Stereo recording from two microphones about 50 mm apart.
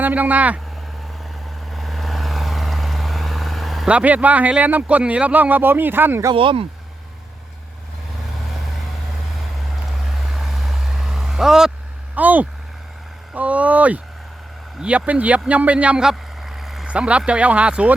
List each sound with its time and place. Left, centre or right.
0.0 s speech: right
1.7 s vehicle: centre
3.8 s speech: right
10.2 s vehicle: centre
12.1 s a sound: right
13.3 s speech: right
16.0 s a sound: centre
16.8 s speech: right